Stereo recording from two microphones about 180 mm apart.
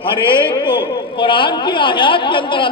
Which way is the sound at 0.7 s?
30° left (ahead or behind).